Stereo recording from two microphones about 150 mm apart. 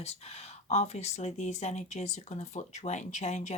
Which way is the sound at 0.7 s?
45° left (ahead or behind).